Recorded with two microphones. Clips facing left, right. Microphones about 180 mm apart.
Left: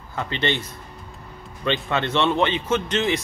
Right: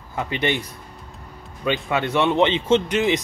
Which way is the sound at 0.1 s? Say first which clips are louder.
Right 2 dB; 15° right (ahead or behind).